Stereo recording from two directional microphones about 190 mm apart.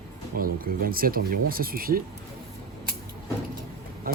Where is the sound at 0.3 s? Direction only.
50° right (ahead or behind).